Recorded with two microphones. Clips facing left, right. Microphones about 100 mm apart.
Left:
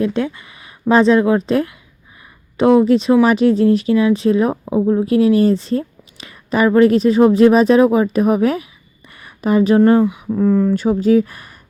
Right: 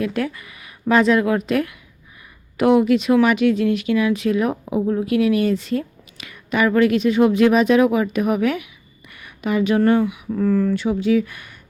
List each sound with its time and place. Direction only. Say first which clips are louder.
0.0 s a woman's voice: left 4 dB; 25° left (ahead or behind)
10.8 s speech: left 5 dB; 40° left (ahead or behind)